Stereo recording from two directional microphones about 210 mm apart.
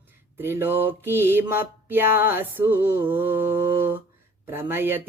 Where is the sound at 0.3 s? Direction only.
10° right (ahead or behind).